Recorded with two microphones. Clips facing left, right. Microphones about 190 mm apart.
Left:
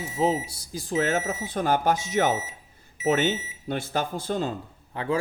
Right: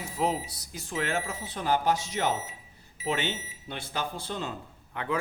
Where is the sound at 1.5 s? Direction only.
50° left (ahead or behind).